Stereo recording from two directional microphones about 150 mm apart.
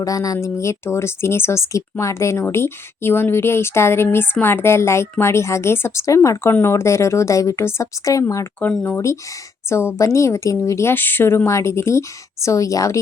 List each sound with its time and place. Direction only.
0.0 s speech: 25° left (ahead or behind)
8.5 s speech: 10° left (ahead or behind)